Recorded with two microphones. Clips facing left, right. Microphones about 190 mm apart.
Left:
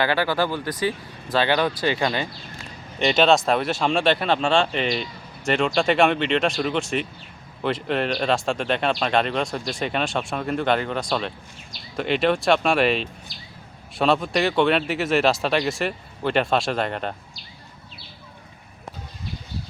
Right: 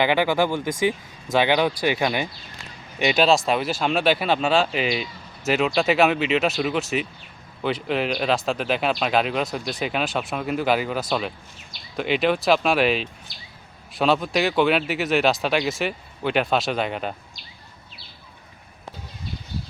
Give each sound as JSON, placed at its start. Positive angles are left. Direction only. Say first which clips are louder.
{"t": 0.0, "sound": "speech", "louder": "right 2 dB", "side_deg": -15}